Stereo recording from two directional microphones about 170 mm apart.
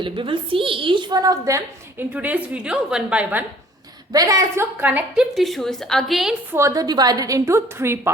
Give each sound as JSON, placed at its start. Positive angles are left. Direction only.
{"t": 0.0, "sound": "a woman's voice", "side_deg": -30}
{"t": 4.1, "sound": "a woman's voice", "side_deg": -20}
{"t": 6.5, "sound": "a woman's voice", "side_deg": -15}